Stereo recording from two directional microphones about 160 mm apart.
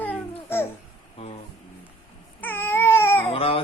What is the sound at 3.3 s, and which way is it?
Baby cry, 35° left (ahead or behind).